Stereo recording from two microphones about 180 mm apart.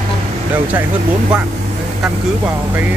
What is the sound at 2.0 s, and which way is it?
Speech, centre (ahead or behind).